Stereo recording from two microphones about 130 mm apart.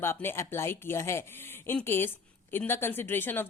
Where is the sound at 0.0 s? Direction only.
20° left (ahead or behind).